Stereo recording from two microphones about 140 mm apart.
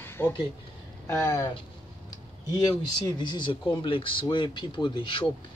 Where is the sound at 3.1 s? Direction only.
30° left (ahead or behind).